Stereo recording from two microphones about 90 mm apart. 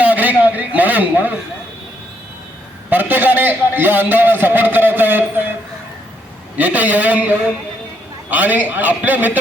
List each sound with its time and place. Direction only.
0.0 s a sound: 20° right (ahead or behind)
2.9 s a man's voice: 20° right (ahead or behind)
6.6 s a man's voice: 15° right (ahead or behind)